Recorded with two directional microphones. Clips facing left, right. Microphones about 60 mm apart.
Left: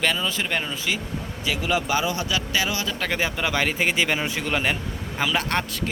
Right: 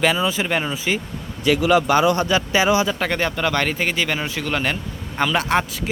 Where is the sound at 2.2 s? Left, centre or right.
Right.